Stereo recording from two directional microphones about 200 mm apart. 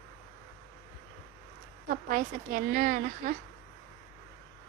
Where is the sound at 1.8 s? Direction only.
40° right (ahead or behind).